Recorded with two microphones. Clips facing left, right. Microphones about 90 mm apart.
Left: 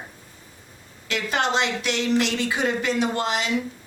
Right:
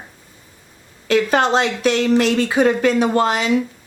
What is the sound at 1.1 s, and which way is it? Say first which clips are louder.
Speech: right 8 dB; 40° right (ahead or behind).